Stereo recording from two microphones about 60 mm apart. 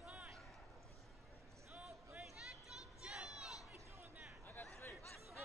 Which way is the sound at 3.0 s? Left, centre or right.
Centre.